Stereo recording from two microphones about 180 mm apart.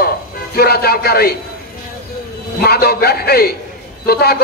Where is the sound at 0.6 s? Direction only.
60° left (ahead or behind).